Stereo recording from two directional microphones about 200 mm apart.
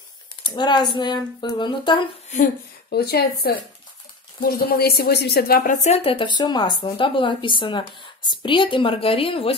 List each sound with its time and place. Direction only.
0.4 s speech: 20° left (ahead or behind)
2.9 s speech: 55° left (ahead or behind)
5.9 s speech: 30° left (ahead or behind)